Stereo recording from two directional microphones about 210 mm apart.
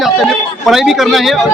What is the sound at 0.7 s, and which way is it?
Speech, centre (ahead or behind).